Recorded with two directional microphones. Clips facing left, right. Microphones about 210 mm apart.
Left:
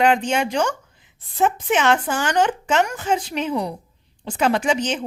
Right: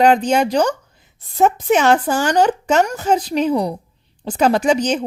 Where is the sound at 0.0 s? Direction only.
40° right (ahead or behind).